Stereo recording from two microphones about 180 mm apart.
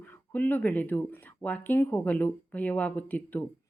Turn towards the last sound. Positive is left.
turn(degrees=10)  # may be behind; listen again after turning